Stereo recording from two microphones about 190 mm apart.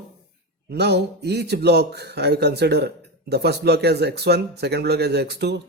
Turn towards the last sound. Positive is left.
turn(degrees=-60)  # may be behind; listen again after turning